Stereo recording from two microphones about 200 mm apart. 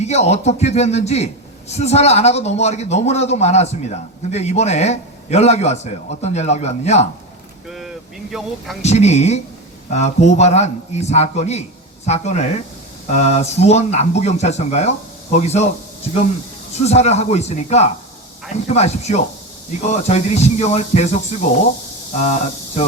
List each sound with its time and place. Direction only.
0.0 s a man's voice: 35° left (ahead or behind)
7.7 s speech: centre (ahead or behind)
8.8 s a man's voice: 35° left (ahead or behind)
16.8 s a man's voice: 35° left (ahead or behind)
22.1 s speech: 35° left (ahead or behind)